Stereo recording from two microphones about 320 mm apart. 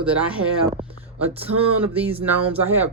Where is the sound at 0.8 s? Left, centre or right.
Centre.